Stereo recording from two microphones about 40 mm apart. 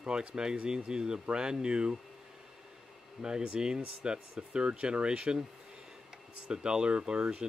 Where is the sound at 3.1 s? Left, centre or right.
Right.